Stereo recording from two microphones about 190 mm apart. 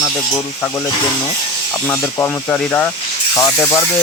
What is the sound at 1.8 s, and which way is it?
Speech, 10° left (ahead or behind).